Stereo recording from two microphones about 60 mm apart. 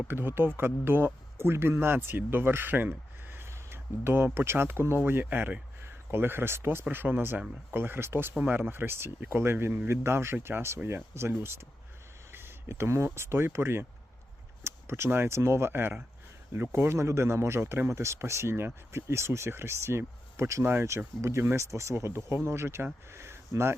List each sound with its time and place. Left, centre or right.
0.1 s speech: right
5.2 s speech: right
5.8 s speech: right
8.4 s speech: right
12.3 s a sound: right
13.1 s speech: right
23.1 s a sound: right